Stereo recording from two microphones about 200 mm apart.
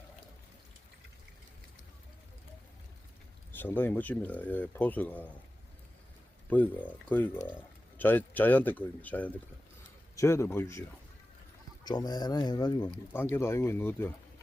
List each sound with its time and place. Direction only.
3.5 s speech: 10° left (ahead or behind)
6.5 s speech: 10° left (ahead or behind)